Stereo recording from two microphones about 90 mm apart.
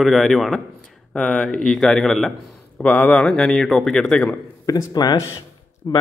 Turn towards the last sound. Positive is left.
turn(degrees=50)  # may be behind; listen again after turning